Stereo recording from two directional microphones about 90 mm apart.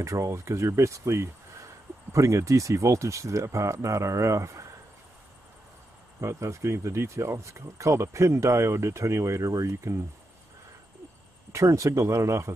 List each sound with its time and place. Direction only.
0.0 s speech: 35° right (ahead or behind)
6.2 s speech: 35° right (ahead or behind)
11.5 s speech: 35° right (ahead or behind)